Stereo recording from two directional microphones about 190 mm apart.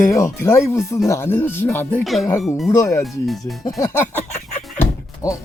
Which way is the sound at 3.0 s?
Centre (ahead or behind).